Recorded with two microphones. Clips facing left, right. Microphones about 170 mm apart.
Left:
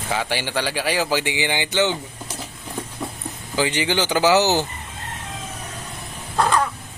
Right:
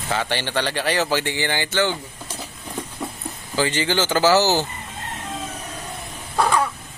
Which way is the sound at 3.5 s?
15° left (ahead or behind).